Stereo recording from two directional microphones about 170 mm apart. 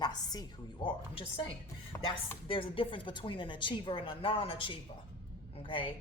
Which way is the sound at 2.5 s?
30° left (ahead or behind).